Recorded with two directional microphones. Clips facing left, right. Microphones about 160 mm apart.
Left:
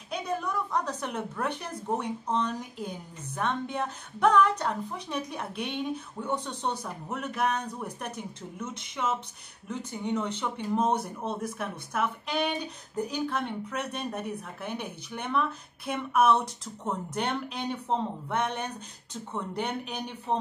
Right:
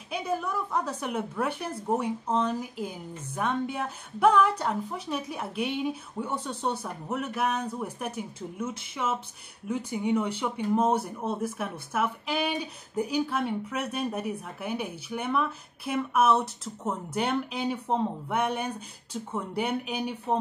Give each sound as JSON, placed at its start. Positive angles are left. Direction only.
{"t": 0.1, "sound": "speech", "side_deg": -5}